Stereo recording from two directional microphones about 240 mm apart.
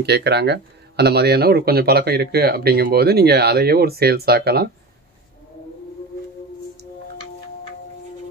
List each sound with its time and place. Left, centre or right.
0.0 s speech: right